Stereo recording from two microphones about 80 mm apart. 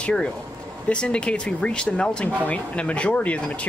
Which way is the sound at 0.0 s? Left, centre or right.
Centre.